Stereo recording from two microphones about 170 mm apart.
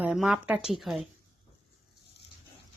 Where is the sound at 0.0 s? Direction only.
5° right (ahead or behind).